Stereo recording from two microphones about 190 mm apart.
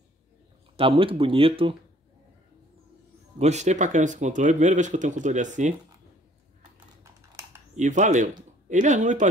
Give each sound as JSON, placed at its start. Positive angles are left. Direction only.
{"t": 0.7, "sound": "speech", "side_deg": -30}
{"t": 3.3, "sound": "speech", "side_deg": -35}
{"t": 7.0, "sound": "typing", "side_deg": -15}
{"t": 7.7, "sound": "speech", "side_deg": -40}